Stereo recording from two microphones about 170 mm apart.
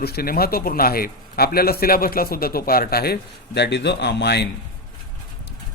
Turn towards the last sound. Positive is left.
turn(degrees=85)